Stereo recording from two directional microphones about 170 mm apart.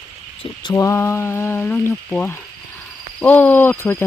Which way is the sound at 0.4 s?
25° left (ahead or behind).